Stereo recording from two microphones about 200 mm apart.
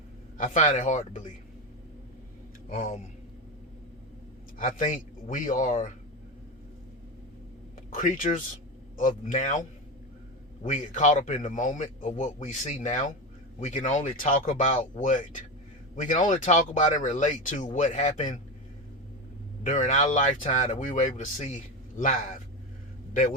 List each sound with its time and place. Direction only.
0.3 s a man's voice: 35° left (ahead or behind)
2.6 s speech: 40° left (ahead or behind)
4.5 s a man's voice: 40° left (ahead or behind)
7.9 s a man's voice: 40° left (ahead or behind)
10.7 s a man's voice: 35° left (ahead or behind)
19.6 s a man's voice: 40° left (ahead or behind)